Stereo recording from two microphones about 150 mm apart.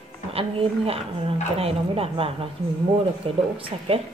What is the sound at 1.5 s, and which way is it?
A woman's voice, 40° right (ahead or behind).